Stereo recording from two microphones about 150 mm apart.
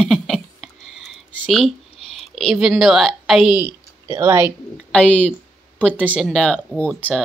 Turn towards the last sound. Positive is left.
turn(degrees=5)  # may be behind; listen again after turning